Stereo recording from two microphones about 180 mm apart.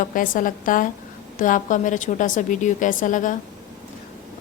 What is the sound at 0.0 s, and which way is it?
A woman's voice, 50° left (ahead or behind).